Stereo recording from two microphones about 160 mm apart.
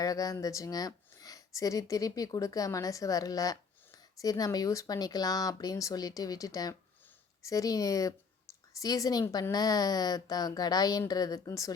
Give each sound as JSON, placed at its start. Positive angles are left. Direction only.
{"t": 0.0, "sound": "speech", "side_deg": 20}